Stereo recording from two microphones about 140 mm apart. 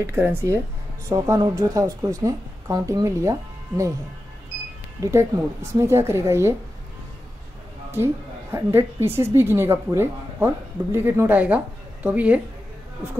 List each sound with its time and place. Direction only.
0.0 s a woman's voice: 15° right (ahead or behind)
5.0 s speech: 20° right (ahead or behind)
7.9 s a woman's voice: 15° right (ahead or behind)